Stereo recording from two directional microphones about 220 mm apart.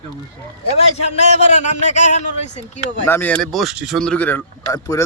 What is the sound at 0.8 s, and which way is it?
A man's voice, 30° left (ahead or behind).